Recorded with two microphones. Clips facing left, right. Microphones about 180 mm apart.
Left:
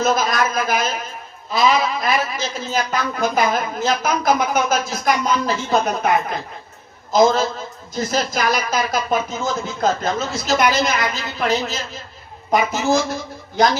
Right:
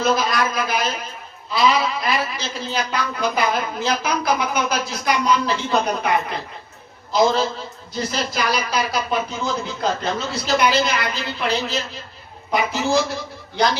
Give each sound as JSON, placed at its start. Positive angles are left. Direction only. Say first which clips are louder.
{"t": 0.0, "sound": "a man's voice", "louder": "left 1 dB", "side_deg": 45}
{"t": 7.1, "sound": "a man's voice", "louder": "left 3 dB", "side_deg": 45}